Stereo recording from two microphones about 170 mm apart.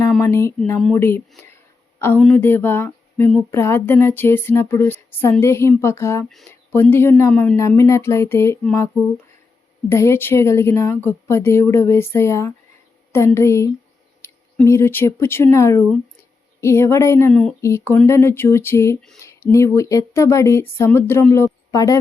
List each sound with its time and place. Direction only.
0.2 s speech: 15° left (ahead or behind)
9.9 s speech: 15° left (ahead or behind)